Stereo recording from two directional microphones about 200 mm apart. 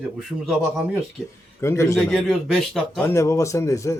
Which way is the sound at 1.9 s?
Centre (ahead or behind).